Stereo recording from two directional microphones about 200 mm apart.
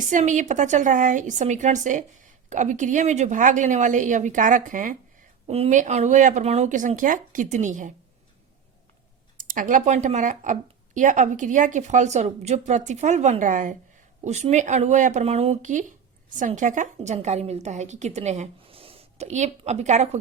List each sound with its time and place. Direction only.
0.0 s speech: 40° right (ahead or behind)
9.4 s speech: 40° right (ahead or behind)